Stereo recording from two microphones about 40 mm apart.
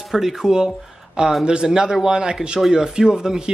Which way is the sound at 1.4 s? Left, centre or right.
Centre.